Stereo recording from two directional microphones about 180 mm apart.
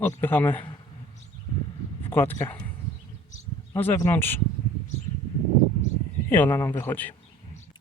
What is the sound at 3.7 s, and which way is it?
Speech, 15° left (ahead or behind).